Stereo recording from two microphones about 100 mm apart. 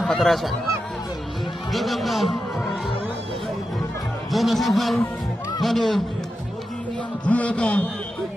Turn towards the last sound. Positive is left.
turn(degrees=10)  # may be behind; listen again after turning